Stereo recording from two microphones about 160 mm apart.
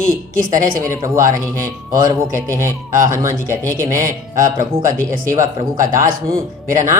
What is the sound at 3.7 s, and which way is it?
A man's voice, 55° right (ahead or behind).